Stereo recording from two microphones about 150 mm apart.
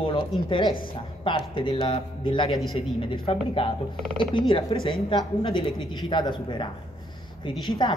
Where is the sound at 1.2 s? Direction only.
35° left (ahead or behind).